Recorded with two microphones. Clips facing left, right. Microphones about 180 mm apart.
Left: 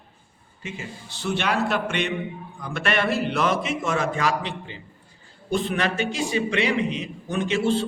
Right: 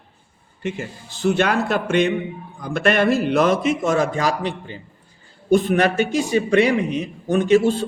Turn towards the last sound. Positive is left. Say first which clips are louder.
# right 6 dB
turn(degrees=-45)  # may be behind; listen again after turning